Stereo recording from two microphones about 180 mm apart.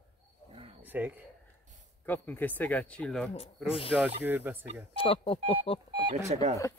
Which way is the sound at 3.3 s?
35° left (ahead or behind).